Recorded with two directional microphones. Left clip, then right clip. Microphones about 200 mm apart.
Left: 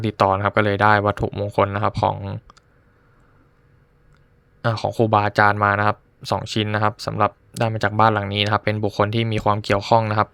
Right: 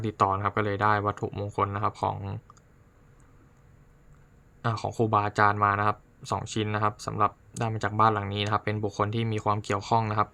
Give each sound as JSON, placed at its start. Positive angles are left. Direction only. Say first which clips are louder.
{"t": 0.0, "sound": "speech", "louder": "left 7 dB", "side_deg": 30}
{"t": 4.6, "sound": "speech", "louder": "left 8 dB", "side_deg": 30}